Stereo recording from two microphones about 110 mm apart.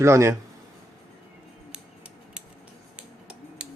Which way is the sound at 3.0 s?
10° right (ahead or behind).